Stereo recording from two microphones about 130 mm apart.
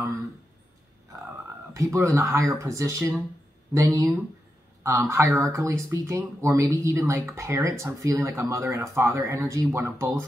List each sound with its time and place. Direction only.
1.7 s speech: 25° right (ahead or behind)